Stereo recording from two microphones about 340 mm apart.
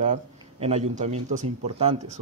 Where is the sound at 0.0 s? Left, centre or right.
Centre.